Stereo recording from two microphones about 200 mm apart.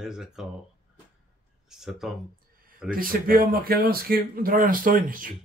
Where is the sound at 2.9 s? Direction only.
45° right (ahead or behind).